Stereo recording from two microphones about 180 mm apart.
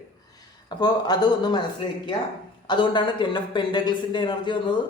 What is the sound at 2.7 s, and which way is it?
Speech, 25° left (ahead or behind).